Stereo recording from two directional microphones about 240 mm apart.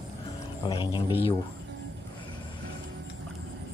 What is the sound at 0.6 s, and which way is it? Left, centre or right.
Speech, centre.